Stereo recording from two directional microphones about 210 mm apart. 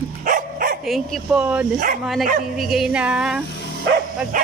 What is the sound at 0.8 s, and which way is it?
Speech, centre (ahead or behind).